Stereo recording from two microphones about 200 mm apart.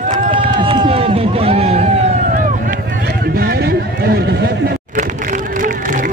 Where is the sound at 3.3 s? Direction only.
50° right (ahead or behind).